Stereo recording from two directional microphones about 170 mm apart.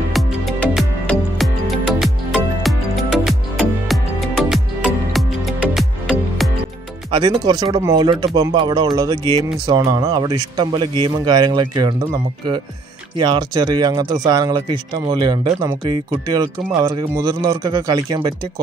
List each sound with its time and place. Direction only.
0.1 s music: centre (ahead or behind)
7.1 s speech: 25° right (ahead or behind)
13.2 s speech: 25° right (ahead or behind)